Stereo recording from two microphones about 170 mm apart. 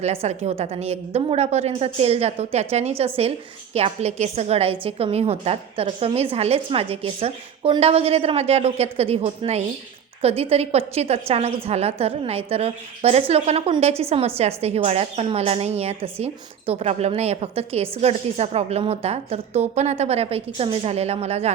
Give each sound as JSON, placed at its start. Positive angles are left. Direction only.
{"t": 0.0, "sound": "a woman's voice", "side_deg": -40}